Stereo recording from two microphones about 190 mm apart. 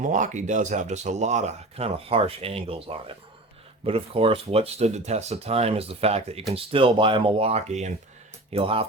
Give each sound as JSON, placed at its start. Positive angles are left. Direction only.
{"t": 0.0, "sound": "speech", "side_deg": -40}